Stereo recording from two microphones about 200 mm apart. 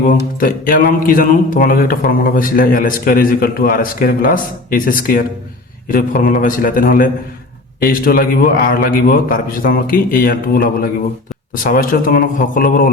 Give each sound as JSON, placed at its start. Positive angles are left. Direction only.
{"t": 0.3, "sound": "a man's voice", "side_deg": 45}